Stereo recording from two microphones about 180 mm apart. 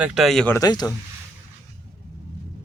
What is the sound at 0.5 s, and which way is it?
Speech, 20° left (ahead or behind).